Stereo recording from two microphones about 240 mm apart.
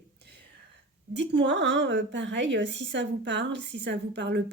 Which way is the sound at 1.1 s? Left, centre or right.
Right.